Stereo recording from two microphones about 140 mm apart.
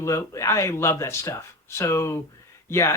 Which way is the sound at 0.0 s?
20° left (ahead or behind).